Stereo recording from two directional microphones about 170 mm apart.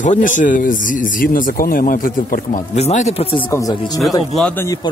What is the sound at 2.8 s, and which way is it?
Speech, 40° left (ahead or behind).